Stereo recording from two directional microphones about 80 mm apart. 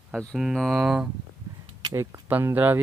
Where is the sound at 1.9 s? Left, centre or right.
Right.